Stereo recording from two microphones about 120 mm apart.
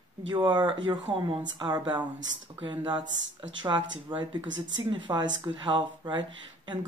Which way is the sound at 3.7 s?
30° right (ahead or behind).